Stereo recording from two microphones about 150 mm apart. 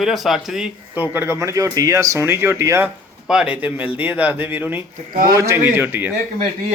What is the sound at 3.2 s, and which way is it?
A man's voice, 5° right (ahead or behind).